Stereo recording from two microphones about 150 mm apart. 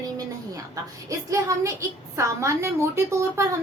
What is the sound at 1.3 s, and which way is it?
A woman's voice, 20° right (ahead or behind).